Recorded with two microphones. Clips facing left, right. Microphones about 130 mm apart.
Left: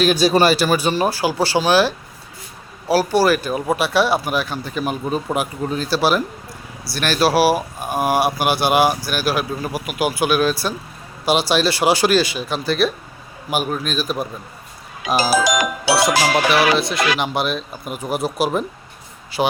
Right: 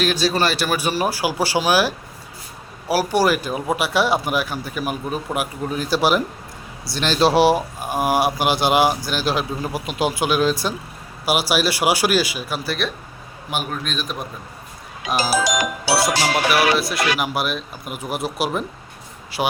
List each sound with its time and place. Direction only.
0.0 s speech: 10° left (ahead or behind)
0.5 s speech: centre (ahead or behind)
2.9 s speech: 15° right (ahead or behind)
7.8 s speech: 20° left (ahead or behind)
8.0 s speech: 15° right (ahead or behind); by 14.3 s 5° left (ahead or behind)
16.0 s speech: centre (ahead or behind)